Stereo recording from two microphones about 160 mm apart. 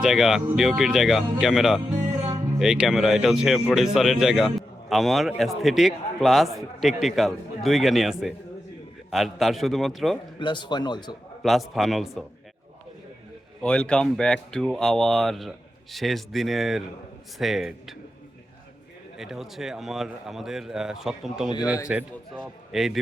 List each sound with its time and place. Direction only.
0.0 s speech: 5° right (ahead or behind)
10.3 s a man's voice: 30° left (ahead or behind)
11.4 s speech: centre (ahead or behind)
13.6 s speech: 5° left (ahead or behind)
19.1 s speech: centre (ahead or behind)